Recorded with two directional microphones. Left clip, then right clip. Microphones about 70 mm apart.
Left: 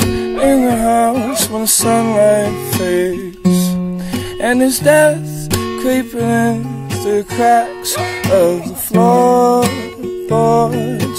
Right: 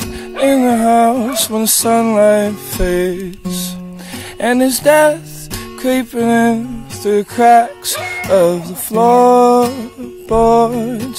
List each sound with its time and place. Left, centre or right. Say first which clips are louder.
0.4 s music: right 1 dB; centre
0.9 s music: right 2 dB; centre
4.4 s music: even; centre
9.6 s music: right 1 dB; left
10.3 s music: right 2 dB; centre